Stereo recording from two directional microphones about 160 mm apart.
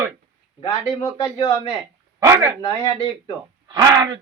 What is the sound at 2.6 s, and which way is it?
Speech, 30° left (ahead or behind).